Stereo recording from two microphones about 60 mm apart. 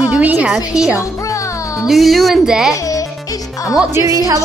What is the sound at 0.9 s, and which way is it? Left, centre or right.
Music, left.